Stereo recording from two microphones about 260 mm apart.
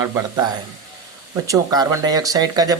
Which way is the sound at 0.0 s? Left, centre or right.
Centre.